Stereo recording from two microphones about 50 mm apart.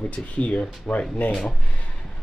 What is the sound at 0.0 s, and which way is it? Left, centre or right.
Speech, left.